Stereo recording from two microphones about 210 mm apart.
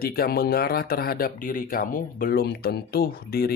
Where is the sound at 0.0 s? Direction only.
45° left (ahead or behind).